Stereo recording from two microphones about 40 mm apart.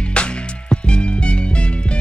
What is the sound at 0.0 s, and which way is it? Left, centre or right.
Music, left.